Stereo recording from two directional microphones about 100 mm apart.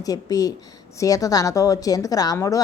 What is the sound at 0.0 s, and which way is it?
A woman's voice, 40° left (ahead or behind).